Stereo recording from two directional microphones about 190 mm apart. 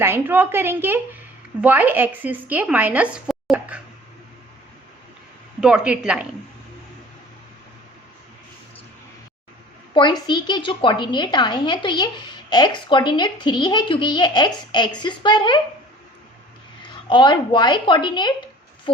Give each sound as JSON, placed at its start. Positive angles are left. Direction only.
{"t": 0.0, "sound": "speech", "side_deg": -10}
{"t": 5.5, "sound": "speech", "side_deg": -5}
{"t": 9.9, "sound": "a woman's voice", "side_deg": 25}
{"t": 16.8, "sound": "a woman's voice", "side_deg": 25}